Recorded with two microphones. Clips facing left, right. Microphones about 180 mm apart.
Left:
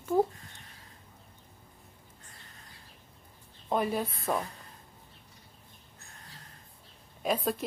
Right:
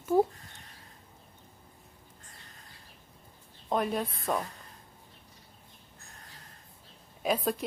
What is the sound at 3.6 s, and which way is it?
Speech, 5° left (ahead or behind).